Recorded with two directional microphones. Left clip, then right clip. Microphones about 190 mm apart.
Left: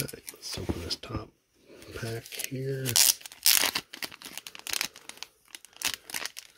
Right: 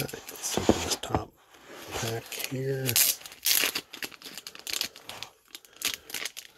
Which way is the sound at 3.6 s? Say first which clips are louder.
Even; 25° left (ahead or behind).